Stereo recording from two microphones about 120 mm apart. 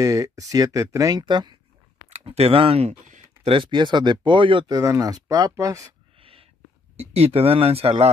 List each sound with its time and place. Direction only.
0.0 s speech: 30° right (ahead or behind)
2.0 s speech: 60° right (ahead or behind)
4.6 s speech: 30° right (ahead or behind)
6.1 s a sound: 50° right (ahead or behind)
7.0 s speech: 60° right (ahead or behind)